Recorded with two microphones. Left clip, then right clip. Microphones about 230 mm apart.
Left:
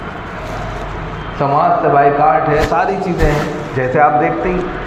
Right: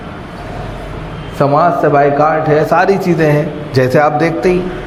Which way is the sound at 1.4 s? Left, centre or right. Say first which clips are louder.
Right 2 dB; right.